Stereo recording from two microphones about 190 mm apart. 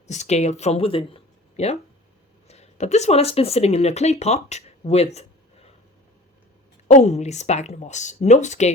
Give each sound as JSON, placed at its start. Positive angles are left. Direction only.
{"t": 0.1, "sound": "speech", "side_deg": 35}
{"t": 6.8, "sound": "speech", "side_deg": 35}